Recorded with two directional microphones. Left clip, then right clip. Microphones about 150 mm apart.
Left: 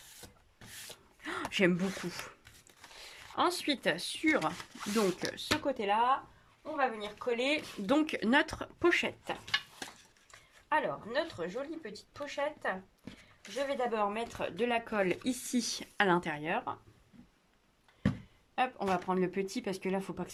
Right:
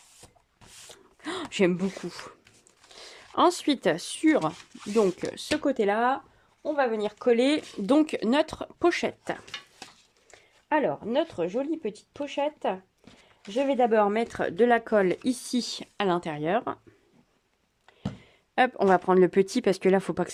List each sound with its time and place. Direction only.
1.2 s speech: 30° right (ahead or behind); by 6.1 s 55° right (ahead or behind)
6.7 s speech: 70° right (ahead or behind)
7.9 s speech: 30° right (ahead or behind)
10.7 s speech: 60° right (ahead or behind); by 16.4 s 25° right (ahead or behind)
16.4 s speech: 45° right (ahead or behind)
18.5 s speech: 65° right (ahead or behind)